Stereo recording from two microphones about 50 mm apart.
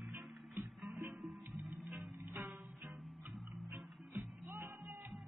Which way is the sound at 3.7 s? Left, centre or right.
Right.